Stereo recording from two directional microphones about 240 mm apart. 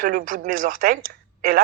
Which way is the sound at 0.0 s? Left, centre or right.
Right.